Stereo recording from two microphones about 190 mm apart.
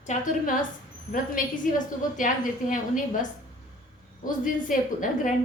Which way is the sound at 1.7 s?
45° left (ahead or behind).